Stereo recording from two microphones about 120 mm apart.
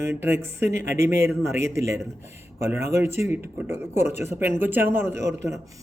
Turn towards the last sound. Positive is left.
turn(degrees=-25)  # may be behind; listen again after turning